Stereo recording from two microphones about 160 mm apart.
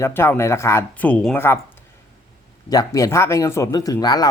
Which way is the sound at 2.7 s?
25° left (ahead or behind).